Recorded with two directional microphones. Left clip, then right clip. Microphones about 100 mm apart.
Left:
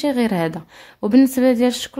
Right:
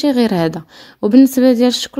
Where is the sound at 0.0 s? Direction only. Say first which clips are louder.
Right 5 dB; 45° right (ahead or behind).